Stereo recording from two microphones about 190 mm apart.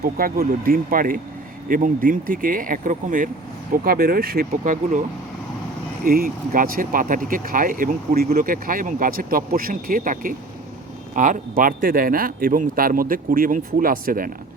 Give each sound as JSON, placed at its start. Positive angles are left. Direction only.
{"t": 0.0, "sound": "speech", "side_deg": -50}
{"t": 6.1, "sound": "speech", "side_deg": -50}